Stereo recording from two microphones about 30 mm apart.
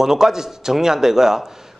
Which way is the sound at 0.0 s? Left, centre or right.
Centre.